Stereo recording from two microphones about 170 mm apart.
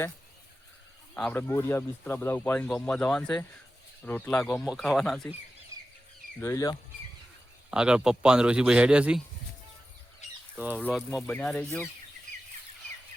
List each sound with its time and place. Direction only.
1.1 s speech: 10° left (ahead or behind)
6.4 s speech: 20° left (ahead or behind)
7.7 s speech: 5° right (ahead or behind)
10.2 s a sound: 45° left (ahead or behind)
10.9 s speech: centre (ahead or behind)